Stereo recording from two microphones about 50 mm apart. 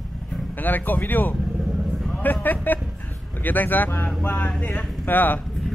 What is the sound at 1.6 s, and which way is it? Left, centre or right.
Vehicle, centre.